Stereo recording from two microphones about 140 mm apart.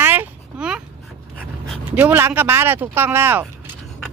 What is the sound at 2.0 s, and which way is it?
Speech, 15° right (ahead or behind).